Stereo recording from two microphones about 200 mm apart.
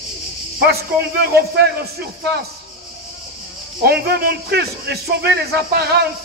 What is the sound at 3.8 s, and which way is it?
A man's voice, 55° right (ahead or behind).